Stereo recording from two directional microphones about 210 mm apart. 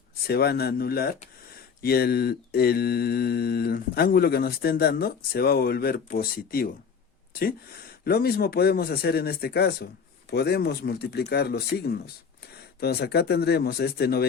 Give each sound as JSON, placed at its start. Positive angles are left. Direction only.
{"t": 0.3, "sound": "mantra", "side_deg": 50}
{"t": 8.0, "sound": "mantra", "side_deg": 45}